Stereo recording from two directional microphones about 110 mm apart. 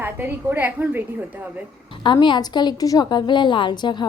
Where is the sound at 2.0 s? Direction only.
45° left (ahead or behind).